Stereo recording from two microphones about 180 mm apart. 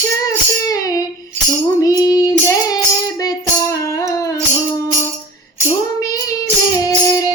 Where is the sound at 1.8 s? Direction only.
20° left (ahead or behind).